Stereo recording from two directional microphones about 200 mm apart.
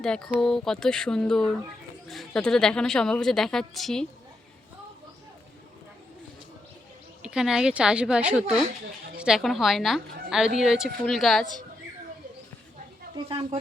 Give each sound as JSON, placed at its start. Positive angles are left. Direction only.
{"t": 0.0, "sound": "a woman's voice", "side_deg": 5}
{"t": 7.2, "sound": "a woman's voice", "side_deg": -5}
{"t": 13.2, "sound": "speech", "side_deg": -25}